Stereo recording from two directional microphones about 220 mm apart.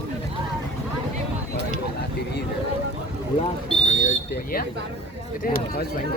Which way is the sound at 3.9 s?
40° left (ahead or behind).